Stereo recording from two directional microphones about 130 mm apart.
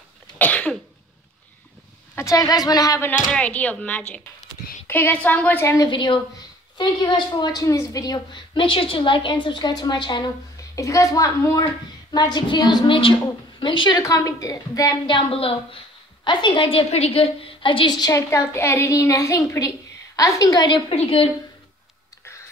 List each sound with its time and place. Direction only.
0.4 s cough: 10° left (ahead or behind)
2.1 s a woman's voice: 25° left (ahead or behind)
3.3 s a woman's voice: 10° left (ahead or behind)
5.9 s a woman's voice: 40° left (ahead or behind)
10.8 s a woman's voice: 25° left (ahead or behind)
15.0 s a woman's voice: 45° left (ahead or behind)